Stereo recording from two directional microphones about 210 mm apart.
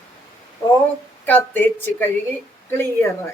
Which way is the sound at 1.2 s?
10° left (ahead or behind).